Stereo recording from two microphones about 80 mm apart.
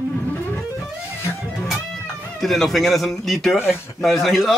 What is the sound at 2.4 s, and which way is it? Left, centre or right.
A man's voice, centre.